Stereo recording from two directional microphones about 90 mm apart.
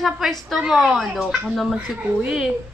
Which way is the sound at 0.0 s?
Centre (ahead or behind).